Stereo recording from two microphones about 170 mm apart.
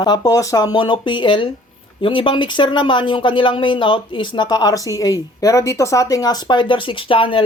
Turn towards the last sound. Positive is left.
turn(degrees=30)  # may be behind; listen again after turning